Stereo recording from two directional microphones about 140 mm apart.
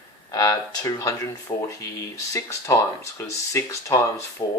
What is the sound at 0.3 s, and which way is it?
Speech, 25° left (ahead or behind).